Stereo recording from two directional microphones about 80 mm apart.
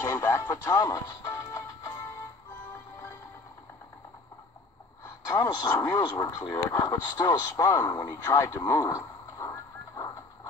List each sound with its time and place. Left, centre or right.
0.0 s music: left
5.0 s a sound: left
5.5 s speech: left